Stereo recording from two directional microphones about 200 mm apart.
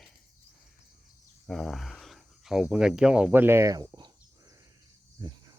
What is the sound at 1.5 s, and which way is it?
Speech, centre (ahead or behind).